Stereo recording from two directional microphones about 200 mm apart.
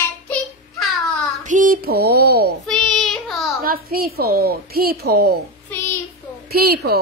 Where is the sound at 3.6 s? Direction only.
50° right (ahead or behind).